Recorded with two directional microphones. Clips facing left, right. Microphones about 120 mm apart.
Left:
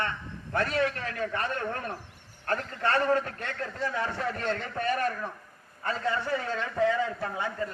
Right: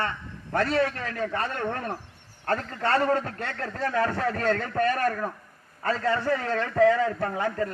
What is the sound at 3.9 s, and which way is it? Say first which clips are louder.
A man's voice: right 9 dB; 50° right (ahead or behind).